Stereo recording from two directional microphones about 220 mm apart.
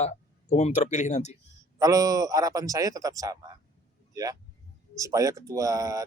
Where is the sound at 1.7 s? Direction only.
15° right (ahead or behind).